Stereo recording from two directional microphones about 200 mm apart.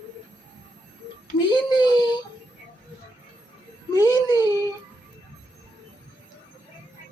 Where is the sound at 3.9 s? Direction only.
20° left (ahead or behind).